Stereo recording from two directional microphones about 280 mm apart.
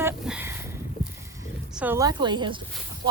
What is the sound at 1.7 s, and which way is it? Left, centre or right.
Speech, centre.